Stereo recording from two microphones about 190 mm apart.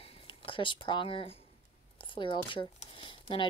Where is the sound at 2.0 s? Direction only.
25° left (ahead or behind).